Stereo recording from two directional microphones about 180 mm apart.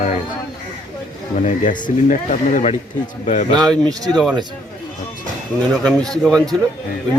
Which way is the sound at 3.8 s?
20° right (ahead or behind).